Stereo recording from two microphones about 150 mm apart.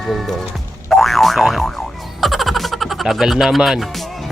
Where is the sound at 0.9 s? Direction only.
Centre (ahead or behind).